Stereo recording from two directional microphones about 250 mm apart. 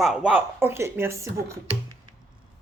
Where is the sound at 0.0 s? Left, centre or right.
Centre.